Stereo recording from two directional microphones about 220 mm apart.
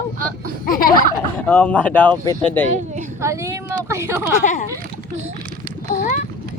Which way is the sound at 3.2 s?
15° right (ahead or behind).